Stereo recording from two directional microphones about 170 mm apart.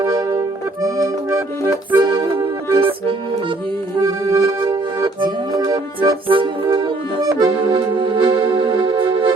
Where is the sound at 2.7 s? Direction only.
30° right (ahead or behind).